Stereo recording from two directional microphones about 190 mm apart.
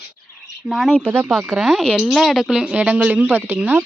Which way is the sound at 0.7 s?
Centre (ahead or behind).